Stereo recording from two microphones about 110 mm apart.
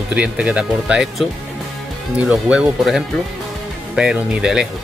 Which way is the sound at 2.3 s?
10° right (ahead or behind).